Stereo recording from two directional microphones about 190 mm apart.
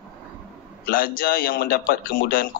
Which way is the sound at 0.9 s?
50° left (ahead or behind).